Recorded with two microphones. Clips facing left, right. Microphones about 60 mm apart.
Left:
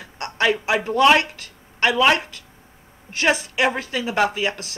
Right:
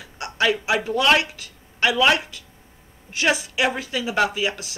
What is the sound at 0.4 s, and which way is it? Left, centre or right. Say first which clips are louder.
Speech: left 1 dB; centre.